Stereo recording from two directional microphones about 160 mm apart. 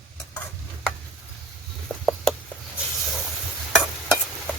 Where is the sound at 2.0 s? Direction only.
5° left (ahead or behind).